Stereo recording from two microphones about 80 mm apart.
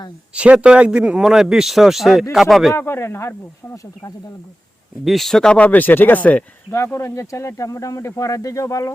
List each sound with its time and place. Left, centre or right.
0.3 s a man's voice: centre
2.7 s speech: left
5.0 s speech: centre; by 6.7 s left
6.7 s speech: left